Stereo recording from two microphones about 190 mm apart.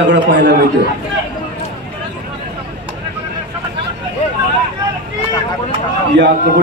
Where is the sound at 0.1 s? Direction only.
70° right (ahead or behind).